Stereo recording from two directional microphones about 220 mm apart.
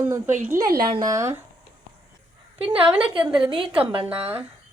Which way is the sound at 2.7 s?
25° right (ahead or behind).